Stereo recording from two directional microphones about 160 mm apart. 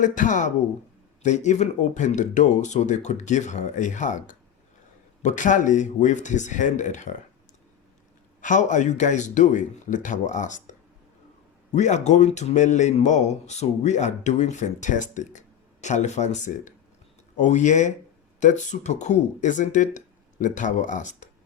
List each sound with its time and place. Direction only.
0.0 s a man's voice: 50° left (ahead or behind)
8.4 s a man's voice: 50° left (ahead or behind)